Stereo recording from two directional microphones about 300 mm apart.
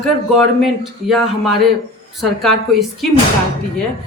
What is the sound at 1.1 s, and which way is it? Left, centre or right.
Speech, centre.